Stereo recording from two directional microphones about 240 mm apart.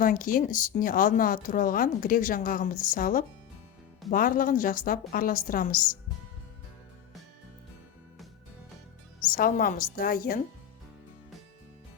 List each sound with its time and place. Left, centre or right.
0.0 s speech: left
9.3 s speech: left